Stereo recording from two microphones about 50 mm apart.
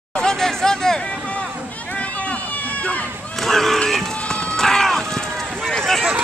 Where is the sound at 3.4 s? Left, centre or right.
Centre.